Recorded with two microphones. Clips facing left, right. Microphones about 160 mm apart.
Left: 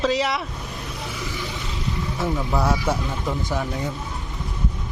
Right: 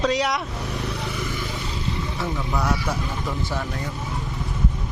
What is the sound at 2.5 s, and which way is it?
Speech, 25° left (ahead or behind).